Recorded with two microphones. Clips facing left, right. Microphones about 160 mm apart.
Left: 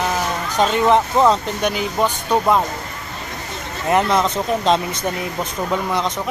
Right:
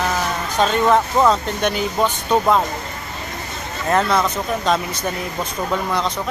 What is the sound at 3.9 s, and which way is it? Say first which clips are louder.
Speech: left 1 dB; 15° left (ahead or behind).